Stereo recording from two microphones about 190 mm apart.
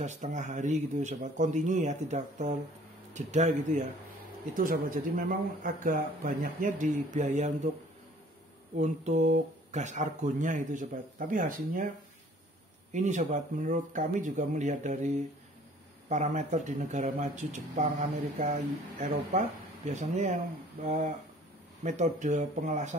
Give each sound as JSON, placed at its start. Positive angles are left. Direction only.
{"t": 0.0, "sound": "speech", "side_deg": -40}
{"t": 8.7, "sound": "speech", "side_deg": -40}
{"t": 12.9, "sound": "speech", "side_deg": -40}